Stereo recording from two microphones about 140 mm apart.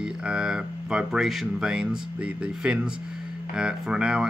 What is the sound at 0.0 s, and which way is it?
Speech, 5° right (ahead or behind).